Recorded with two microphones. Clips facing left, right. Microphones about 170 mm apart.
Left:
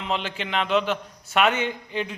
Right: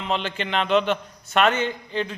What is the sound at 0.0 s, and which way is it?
A man's voice, 5° left (ahead or behind).